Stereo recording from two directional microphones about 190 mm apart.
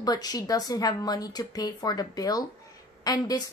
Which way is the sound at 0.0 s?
20° left (ahead or behind).